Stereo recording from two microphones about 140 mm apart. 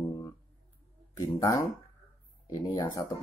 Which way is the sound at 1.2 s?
25° left (ahead or behind).